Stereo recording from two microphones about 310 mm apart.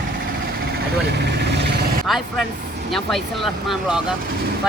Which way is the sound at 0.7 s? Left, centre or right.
Right.